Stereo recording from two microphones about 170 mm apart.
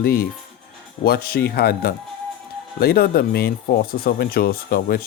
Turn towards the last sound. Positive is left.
turn(degrees=60)  # may be behind; listen again after turning